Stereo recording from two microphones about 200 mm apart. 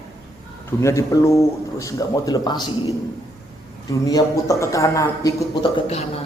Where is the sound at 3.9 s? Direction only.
15° left (ahead or behind).